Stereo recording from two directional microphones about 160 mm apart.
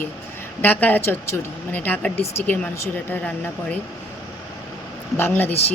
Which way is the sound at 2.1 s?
40° left (ahead or behind).